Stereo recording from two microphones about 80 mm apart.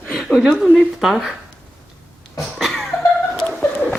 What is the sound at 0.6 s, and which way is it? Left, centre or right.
Speech, centre.